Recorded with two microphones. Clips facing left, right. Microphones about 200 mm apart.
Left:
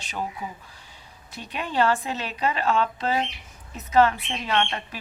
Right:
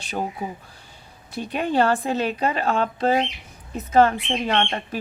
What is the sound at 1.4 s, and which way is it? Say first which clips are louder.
A woman's voice: right 4 dB; 55° right (ahead or behind).